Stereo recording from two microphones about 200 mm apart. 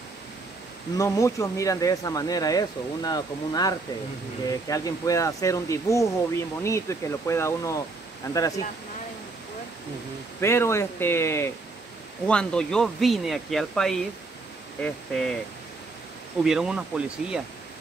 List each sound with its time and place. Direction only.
0.9 s speech: 15° left (ahead or behind)
10.4 s speech: 15° left (ahead or behind)
16.4 s speech: 5° right (ahead or behind)